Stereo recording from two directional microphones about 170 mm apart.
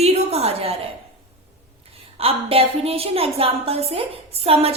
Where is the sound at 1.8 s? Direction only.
35° right (ahead or behind).